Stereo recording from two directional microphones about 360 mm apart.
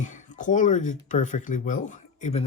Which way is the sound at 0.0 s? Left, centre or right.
Centre.